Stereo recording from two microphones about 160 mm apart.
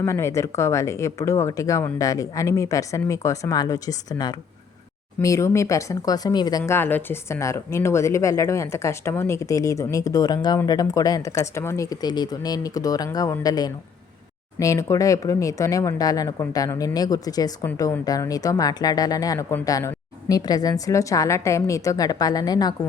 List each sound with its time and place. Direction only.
0.0 s speech: 15° left (ahead or behind)